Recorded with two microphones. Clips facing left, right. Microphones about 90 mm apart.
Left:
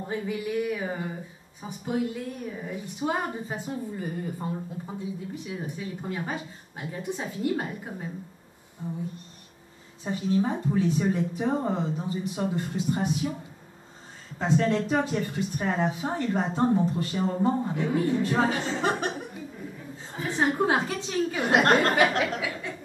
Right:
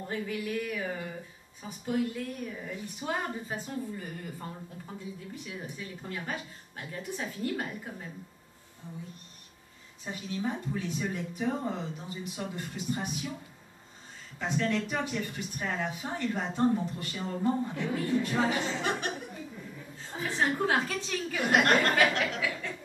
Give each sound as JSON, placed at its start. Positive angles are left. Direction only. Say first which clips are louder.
{"t": 0.0, "sound": "speech", "louder": "left 4 dB", "side_deg": 20}
{"t": 8.8, "sound": "speech", "louder": "left 11 dB", "side_deg": 40}
{"t": 10.0, "sound": "speech", "louder": "left 8 dB", "side_deg": 30}
{"t": 14.4, "sound": "speech", "louder": "left 6 dB", "side_deg": 30}
{"t": 20.2, "sound": "speech", "louder": "left 4 dB", "side_deg": 20}
{"t": 22.4, "sound": "a sound", "louder": "left 1 dB", "side_deg": 15}